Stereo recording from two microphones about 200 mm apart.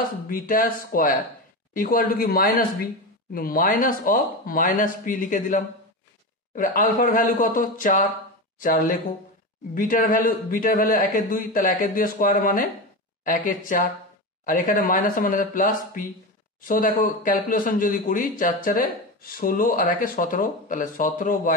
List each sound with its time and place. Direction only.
0.3 s speech: 45° left (ahead or behind)